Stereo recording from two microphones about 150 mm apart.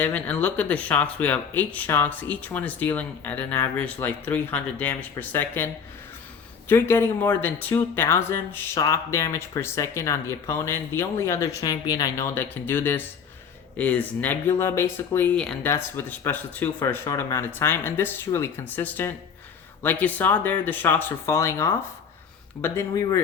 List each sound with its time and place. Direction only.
0.0 s speech: 10° left (ahead or behind)
15.4 s speech: 5° left (ahead or behind)
15.7 s speech: 15° left (ahead or behind)